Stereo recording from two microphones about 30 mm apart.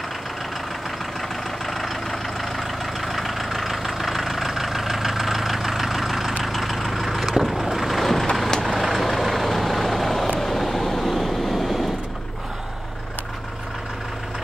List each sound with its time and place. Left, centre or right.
1.7 s vehicle: centre
8.0 s vehicle: centre
8.5 s vehicle: left
8.7 s vehicle: centre